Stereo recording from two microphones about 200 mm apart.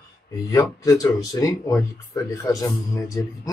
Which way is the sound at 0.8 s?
20° left (ahead or behind).